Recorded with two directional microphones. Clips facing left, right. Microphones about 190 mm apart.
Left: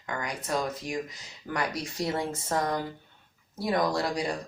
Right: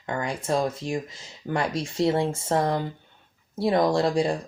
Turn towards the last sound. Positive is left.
turn(degrees=-25)  # may be behind; listen again after turning